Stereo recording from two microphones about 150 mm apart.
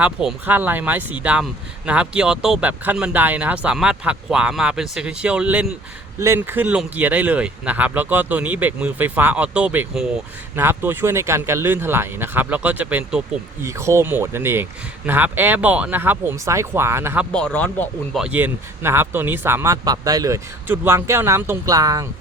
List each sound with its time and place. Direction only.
0.0 s speech: 5° right (ahead or behind)
13.6 s speech: 20° right (ahead or behind)
17.3 s speech: 10° left (ahead or behind)
18.2 s speech: 10° right (ahead or behind)